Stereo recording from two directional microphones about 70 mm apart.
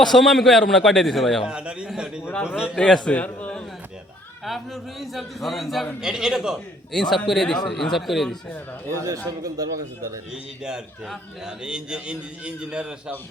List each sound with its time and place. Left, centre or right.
0.0 s a man's voice: centre
1.5 s a man's voice: centre
2.7 s a man's voice: centre
4.4 s a man's voice: centre
6.9 s a man's voice: centre
9.0 s a man's voice: right
10.3 s a man's voice: centre